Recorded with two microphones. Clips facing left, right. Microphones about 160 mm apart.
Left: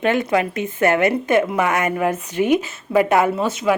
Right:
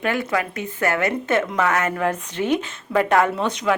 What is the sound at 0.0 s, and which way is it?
A woman's voice, 20° left (ahead or behind).